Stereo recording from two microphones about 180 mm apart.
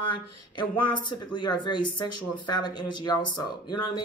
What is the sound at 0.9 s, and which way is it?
Speech, 25° left (ahead or behind).